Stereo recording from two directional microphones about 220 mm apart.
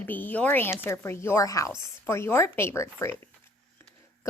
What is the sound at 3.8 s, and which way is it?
Scissors, 10° left (ahead or behind).